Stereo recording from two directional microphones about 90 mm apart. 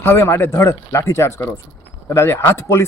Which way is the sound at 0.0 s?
30° left (ahead or behind).